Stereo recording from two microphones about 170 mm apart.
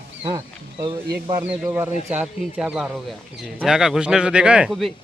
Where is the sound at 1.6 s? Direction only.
15° right (ahead or behind).